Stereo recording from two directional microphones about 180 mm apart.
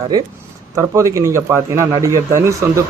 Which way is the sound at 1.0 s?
15° right (ahead or behind).